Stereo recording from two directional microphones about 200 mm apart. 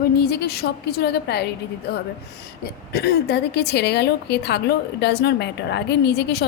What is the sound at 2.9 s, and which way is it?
A woman's voice, 55° left (ahead or behind).